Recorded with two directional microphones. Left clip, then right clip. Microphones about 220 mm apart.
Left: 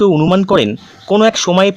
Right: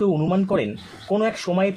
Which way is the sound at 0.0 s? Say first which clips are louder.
Left 10 dB; 40° left (ahead or behind).